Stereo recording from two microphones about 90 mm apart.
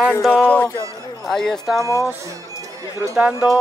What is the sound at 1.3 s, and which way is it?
Speech, 5° left (ahead or behind).